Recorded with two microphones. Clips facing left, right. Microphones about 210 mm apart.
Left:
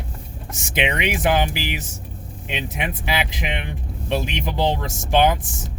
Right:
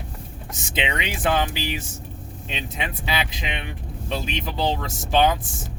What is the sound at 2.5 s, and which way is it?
Speech, 20° left (ahead or behind).